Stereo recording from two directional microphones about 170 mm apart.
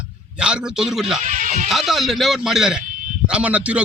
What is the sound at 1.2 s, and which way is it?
Music, 45° right (ahead or behind).